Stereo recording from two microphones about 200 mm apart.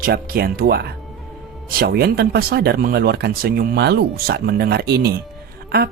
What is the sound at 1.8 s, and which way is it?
Speech, 50° right (ahead or behind).